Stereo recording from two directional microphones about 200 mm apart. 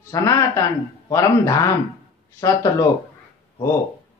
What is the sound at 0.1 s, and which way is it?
Speech, 15° left (ahead or behind).